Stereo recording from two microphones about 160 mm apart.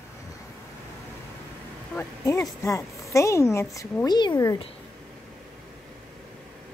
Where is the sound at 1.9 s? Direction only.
20° left (ahead or behind).